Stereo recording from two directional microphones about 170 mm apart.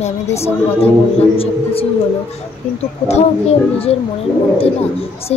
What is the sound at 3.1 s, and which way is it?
Speech, 40° left (ahead or behind).